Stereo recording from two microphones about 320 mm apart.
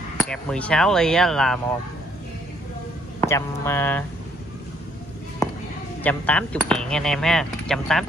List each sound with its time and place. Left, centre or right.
0.2 s speech: centre
3.2 s speech: centre
5.4 s music: centre
6.0 s speech: centre